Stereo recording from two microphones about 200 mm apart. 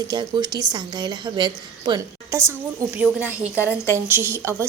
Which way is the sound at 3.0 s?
5° right (ahead or behind).